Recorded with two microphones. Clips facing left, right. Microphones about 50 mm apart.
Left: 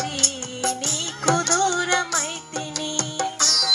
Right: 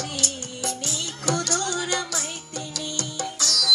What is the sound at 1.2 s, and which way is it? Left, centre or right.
Music, left.